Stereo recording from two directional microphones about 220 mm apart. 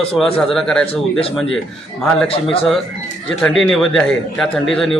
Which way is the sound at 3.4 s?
Centre (ahead or behind).